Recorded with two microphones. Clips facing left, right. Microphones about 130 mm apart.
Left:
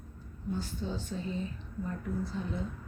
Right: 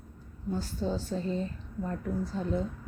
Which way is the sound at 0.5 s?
40° right (ahead or behind).